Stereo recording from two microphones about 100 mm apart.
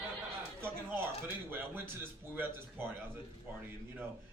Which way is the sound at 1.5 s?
20° right (ahead or behind).